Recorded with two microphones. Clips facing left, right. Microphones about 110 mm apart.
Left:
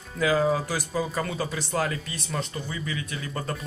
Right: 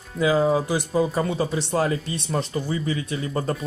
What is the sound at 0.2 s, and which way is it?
Speech, 25° right (ahead or behind).